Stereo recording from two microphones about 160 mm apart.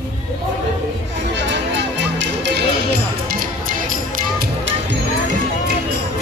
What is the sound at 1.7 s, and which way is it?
Music, 90° right.